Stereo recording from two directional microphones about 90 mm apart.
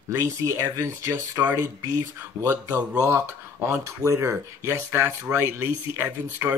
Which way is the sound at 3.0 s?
30° right (ahead or behind).